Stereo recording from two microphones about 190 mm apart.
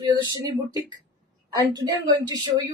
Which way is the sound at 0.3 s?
20° right (ahead or behind).